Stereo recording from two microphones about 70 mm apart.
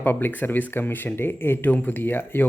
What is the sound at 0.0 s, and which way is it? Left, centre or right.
Speech, left.